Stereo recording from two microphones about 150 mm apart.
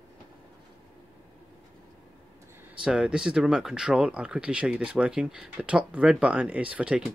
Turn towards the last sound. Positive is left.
turn(degrees=-5)  # may be behind; listen again after turning